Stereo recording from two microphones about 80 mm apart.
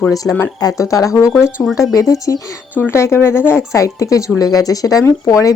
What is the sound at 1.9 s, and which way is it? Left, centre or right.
Speech, left.